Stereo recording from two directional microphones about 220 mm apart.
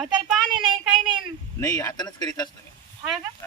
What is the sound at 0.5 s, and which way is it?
Speech, 20° right (ahead or behind).